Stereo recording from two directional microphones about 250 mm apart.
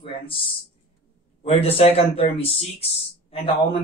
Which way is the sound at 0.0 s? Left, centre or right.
Left.